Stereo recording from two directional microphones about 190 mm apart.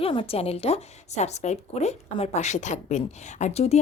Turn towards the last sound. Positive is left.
turn(degrees=35)  # may be behind; listen again after turning